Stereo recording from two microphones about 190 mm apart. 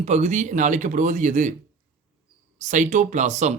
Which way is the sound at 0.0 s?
35° right (ahead or behind).